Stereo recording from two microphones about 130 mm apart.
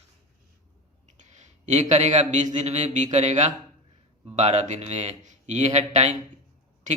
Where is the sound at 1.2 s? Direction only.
60° right (ahead or behind).